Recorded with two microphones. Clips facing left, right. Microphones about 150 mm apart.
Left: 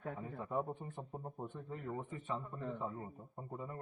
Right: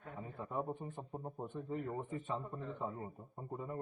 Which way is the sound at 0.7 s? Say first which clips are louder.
Right 2 dB; 5° right (ahead or behind).